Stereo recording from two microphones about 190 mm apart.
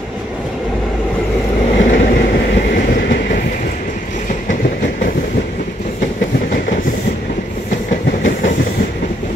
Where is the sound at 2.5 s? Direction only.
45° left (ahead or behind).